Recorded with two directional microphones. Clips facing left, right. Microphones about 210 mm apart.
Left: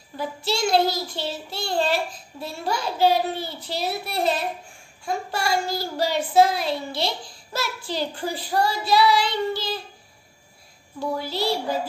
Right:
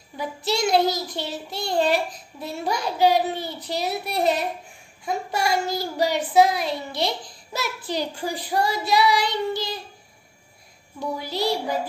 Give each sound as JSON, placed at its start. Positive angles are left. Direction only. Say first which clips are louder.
{"t": 0.2, "sound": "a child's voice", "louder": "right 1 dB", "side_deg": -20}
{"t": 11.0, "sound": "a child's voice", "louder": "left 1 dB", "side_deg": -20}